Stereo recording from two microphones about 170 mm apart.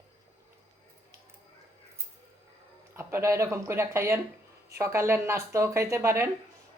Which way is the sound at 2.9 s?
15° right (ahead or behind).